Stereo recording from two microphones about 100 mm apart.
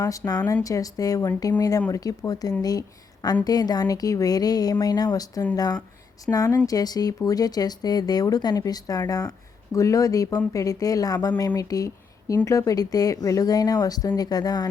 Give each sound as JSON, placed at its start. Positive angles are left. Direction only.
{"t": 0.0, "sound": "a woman's voice", "side_deg": 35}